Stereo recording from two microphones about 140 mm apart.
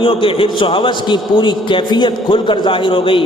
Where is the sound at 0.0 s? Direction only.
40° left (ahead or behind).